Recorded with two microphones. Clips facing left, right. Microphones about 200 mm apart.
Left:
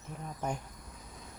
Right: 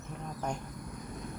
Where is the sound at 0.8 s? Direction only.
60° right (ahead or behind).